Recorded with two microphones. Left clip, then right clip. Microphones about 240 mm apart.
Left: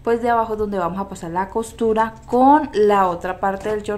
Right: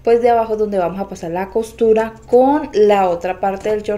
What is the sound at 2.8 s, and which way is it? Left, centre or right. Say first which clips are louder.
Speech: right 3 dB; left.